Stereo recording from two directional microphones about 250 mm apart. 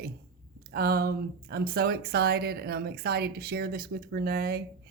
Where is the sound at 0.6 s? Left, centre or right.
Right.